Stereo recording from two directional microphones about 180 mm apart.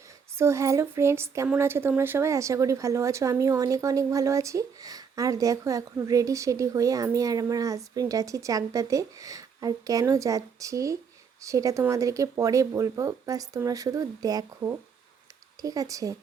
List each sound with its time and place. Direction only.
0.3 s a woman's voice: 15° right (ahead or behind)